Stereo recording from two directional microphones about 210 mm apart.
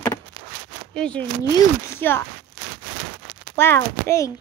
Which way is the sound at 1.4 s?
15° left (ahead or behind).